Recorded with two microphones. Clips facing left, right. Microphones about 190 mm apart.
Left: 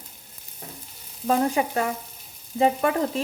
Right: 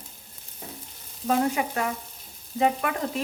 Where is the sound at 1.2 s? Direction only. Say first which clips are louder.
Left 2 dB; 35° left (ahead or behind).